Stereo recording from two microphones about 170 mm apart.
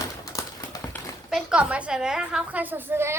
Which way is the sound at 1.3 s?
5° right (ahead or behind).